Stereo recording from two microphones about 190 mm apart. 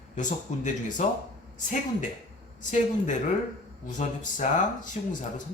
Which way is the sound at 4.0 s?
40° left (ahead or behind).